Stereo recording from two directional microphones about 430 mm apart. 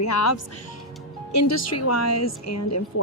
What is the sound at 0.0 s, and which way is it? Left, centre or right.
A woman's voice, left.